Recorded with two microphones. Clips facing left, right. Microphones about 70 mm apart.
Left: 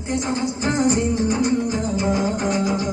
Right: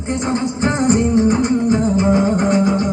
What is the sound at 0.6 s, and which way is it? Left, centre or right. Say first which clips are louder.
Music: right 4 dB; right.